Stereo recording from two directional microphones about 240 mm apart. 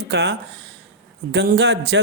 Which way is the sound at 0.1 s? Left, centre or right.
Right.